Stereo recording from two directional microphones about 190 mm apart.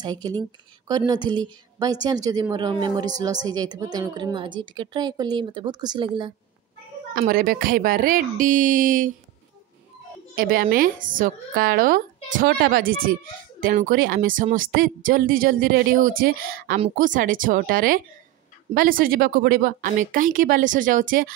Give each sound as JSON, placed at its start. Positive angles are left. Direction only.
{"t": 0.0, "sound": "a woman's voice", "side_deg": -20}
{"t": 7.2, "sound": "a woman's voice", "side_deg": -50}
{"t": 10.3, "sound": "a woman's voice", "side_deg": -50}